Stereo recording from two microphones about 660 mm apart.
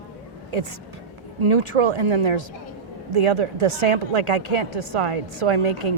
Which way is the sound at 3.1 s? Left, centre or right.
Right.